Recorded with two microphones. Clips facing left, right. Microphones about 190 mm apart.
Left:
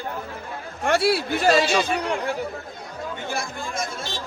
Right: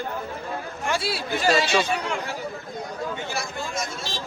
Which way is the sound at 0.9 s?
65° left (ahead or behind).